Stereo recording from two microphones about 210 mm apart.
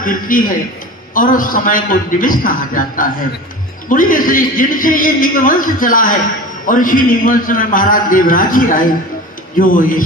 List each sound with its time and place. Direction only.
0.0 s a man's voice: 40° left (ahead or behind)